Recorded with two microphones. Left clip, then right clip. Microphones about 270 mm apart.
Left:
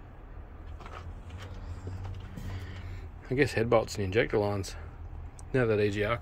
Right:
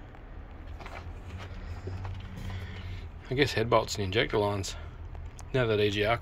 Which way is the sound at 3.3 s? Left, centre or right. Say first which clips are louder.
Even; centre.